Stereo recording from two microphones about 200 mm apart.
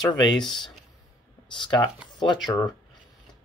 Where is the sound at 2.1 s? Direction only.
25° left (ahead or behind).